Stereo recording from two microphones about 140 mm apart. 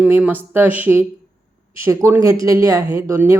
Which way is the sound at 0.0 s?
10° right (ahead or behind).